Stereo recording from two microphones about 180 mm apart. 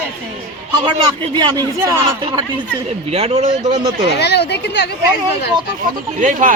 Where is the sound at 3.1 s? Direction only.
35° right (ahead or behind).